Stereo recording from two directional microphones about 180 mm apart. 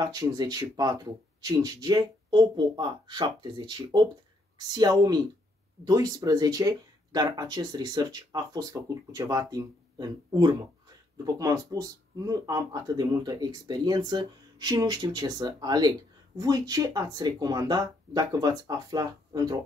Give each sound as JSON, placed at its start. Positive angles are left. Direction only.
{"t": 0.0, "sound": "speech", "side_deg": -20}